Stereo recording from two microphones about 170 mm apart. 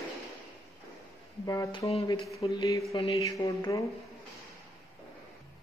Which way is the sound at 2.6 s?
20° left (ahead or behind).